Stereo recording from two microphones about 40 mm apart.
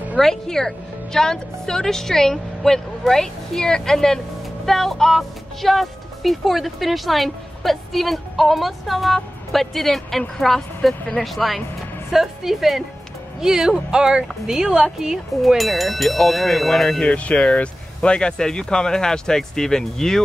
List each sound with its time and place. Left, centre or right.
0.2 s speech: centre
15.0 s speech: centre
17.0 s speech: left; by 20.2 s centre